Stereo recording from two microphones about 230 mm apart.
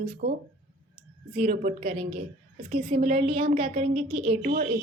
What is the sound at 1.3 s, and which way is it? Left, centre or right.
A woman's voice, right.